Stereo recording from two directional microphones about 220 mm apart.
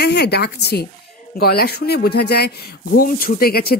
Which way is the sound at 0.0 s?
50° left (ahead or behind).